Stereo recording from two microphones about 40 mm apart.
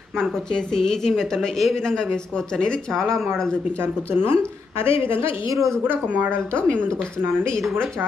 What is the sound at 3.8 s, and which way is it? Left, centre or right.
Speech, right.